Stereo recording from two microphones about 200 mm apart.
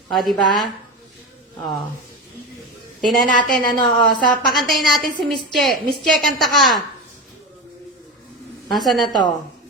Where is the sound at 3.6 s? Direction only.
20° left (ahead or behind).